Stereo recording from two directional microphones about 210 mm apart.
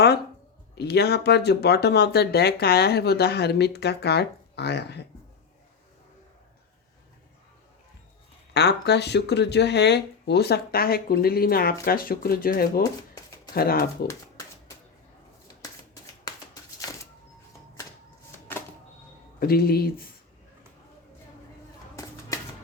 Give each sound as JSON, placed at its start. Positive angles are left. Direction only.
{"t": 0.8, "sound": "speech", "side_deg": 50}
{"t": 8.5, "sound": "speech", "side_deg": 50}
{"t": 16.3, "sound": "shuffling cards", "side_deg": 15}
{"t": 18.5, "sound": "typewriter", "side_deg": 10}
{"t": 19.4, "sound": "speech", "side_deg": 45}